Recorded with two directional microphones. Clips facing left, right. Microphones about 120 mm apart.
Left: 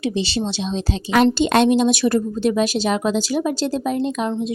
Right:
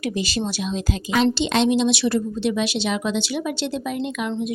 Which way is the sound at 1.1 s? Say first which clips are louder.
Left 4 dB; 50° left (ahead or behind).